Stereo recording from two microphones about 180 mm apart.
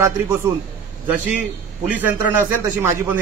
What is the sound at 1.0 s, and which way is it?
A man's voice, 10° right (ahead or behind).